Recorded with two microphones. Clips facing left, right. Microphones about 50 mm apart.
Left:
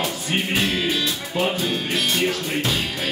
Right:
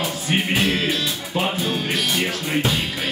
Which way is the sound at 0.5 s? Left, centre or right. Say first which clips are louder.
Even; centre.